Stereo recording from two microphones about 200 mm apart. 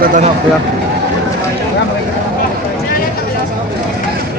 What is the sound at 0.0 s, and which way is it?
Speech, 40° right (ahead or behind).